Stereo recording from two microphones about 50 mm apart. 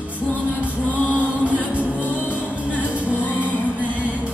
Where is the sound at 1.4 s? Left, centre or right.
Right.